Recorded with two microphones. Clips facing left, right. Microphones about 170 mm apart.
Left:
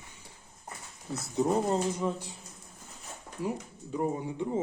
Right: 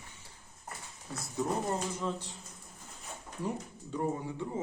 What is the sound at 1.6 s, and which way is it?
Speech, 15° left (ahead or behind).